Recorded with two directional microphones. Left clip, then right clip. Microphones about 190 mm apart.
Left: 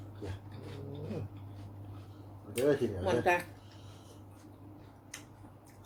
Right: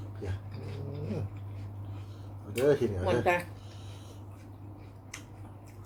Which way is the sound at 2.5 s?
25° right (ahead or behind).